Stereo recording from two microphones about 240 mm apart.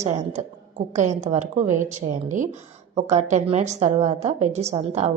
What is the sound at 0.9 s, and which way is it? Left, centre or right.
A woman's voice, right.